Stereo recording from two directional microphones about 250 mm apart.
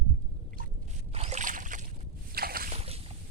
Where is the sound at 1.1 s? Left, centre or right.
Right.